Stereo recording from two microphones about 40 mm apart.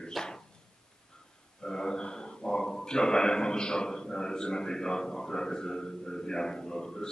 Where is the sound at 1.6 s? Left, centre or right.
Centre.